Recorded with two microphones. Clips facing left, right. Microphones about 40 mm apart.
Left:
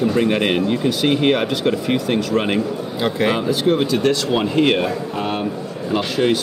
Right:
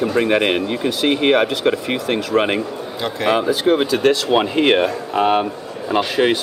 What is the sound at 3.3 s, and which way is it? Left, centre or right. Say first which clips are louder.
Speech: right 2 dB; centre.